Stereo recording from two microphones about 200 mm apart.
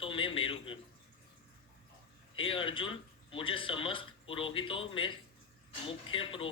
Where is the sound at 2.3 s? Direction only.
25° left (ahead or behind).